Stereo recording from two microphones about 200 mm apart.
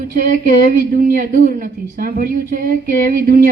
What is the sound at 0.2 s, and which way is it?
A woman's voice, 45° right (ahead or behind).